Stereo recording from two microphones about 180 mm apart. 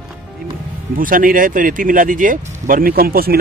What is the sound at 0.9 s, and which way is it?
Speech, 50° right (ahead or behind).